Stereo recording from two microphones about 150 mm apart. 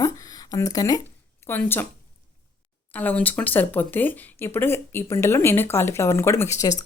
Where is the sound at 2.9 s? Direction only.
10° left (ahead or behind).